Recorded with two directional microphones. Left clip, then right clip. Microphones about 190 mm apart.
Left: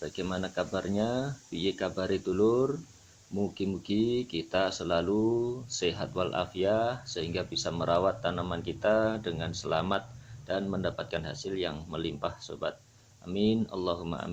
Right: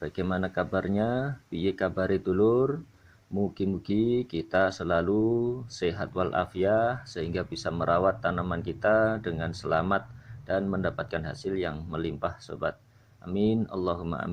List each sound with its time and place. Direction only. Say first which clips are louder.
0.0 s speech: right 4 dB; 30° right (ahead or behind)